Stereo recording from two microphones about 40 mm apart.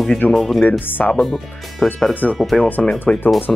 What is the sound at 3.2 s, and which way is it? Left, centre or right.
Speech, left.